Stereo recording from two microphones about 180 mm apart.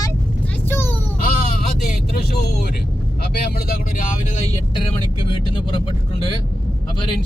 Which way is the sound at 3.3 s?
60° left (ahead or behind).